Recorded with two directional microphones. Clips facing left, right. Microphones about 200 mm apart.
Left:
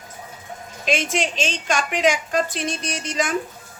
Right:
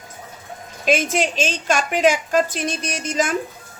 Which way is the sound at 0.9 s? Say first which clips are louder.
Right 4 dB; 40° right (ahead or behind).